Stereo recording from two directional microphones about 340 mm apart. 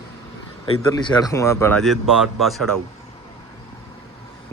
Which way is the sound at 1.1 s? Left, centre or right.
Centre.